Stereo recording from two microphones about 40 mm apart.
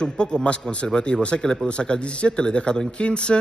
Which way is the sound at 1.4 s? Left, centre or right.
Centre.